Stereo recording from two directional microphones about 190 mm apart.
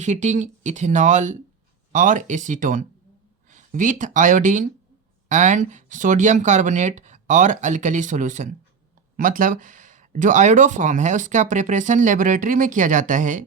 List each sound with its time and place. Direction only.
0.0 s speech: 40° right (ahead or behind)